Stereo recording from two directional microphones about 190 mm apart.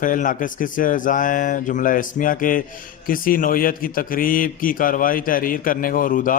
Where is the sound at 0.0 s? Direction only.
45° left (ahead or behind).